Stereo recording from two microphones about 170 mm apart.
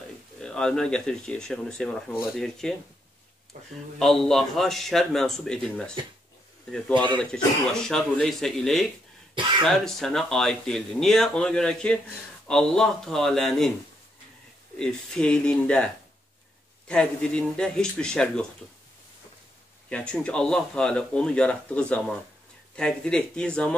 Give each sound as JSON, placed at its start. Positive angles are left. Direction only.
{"t": 0.4, "sound": "speech", "side_deg": 5}
{"t": 3.5, "sound": "speech", "side_deg": -55}
{"t": 4.0, "sound": "speech", "side_deg": 0}
{"t": 6.9, "sound": "speech", "side_deg": -30}
{"t": 7.2, "sound": "speech", "side_deg": 5}
{"t": 9.4, "sound": "throat clearing", "side_deg": -30}
{"t": 9.7, "sound": "speech", "side_deg": 0}
{"t": 14.8, "sound": "speech", "side_deg": 5}
{"t": 19.9, "sound": "speech", "side_deg": 5}